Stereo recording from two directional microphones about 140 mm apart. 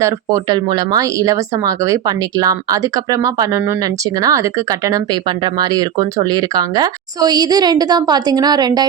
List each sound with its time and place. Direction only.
0.0 s speech: 25° right (ahead or behind)